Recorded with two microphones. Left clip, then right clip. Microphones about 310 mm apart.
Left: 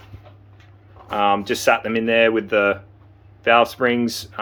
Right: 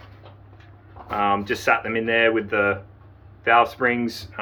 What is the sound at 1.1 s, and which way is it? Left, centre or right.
Speech, left.